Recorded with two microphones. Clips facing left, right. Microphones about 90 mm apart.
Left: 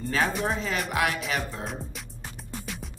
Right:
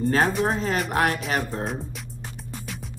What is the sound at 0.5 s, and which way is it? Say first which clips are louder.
Speech: right 4 dB; 40° right (ahead or behind).